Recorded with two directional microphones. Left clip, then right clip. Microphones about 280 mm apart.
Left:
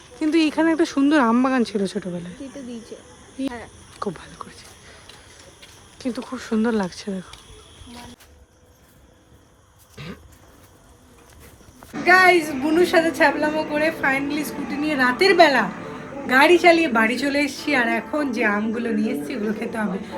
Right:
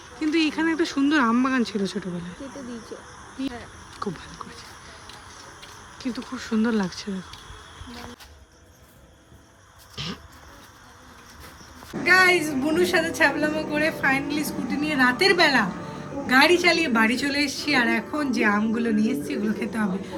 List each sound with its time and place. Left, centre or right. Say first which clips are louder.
0.2 s a woman's voice: left 4 dB; centre
2.9 s speech: even; left
4.0 s a sound: left 3 dB; centre
6.0 s a woman's voice: left 3 dB; centre
9.9 s a sound: right 5 dB; centre
12.0 s a woman's voice: left 3 dB; centre